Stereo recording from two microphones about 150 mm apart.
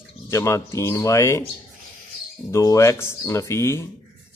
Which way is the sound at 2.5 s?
20° left (ahead or behind).